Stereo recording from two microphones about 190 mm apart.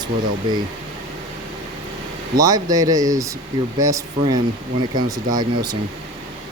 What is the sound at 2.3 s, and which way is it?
Speech, 20° right (ahead or behind).